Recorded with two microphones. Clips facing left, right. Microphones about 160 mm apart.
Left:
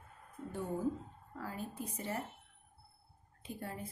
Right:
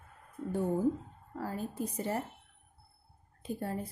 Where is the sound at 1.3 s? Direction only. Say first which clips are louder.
Right 6 dB; 40° right (ahead or behind).